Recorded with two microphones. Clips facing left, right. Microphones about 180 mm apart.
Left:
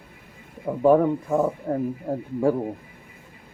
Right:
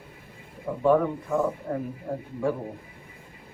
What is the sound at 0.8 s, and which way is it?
Speech, 35° left (ahead or behind).